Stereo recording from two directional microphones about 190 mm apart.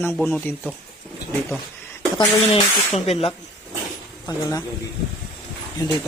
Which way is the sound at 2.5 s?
30° left (ahead or behind).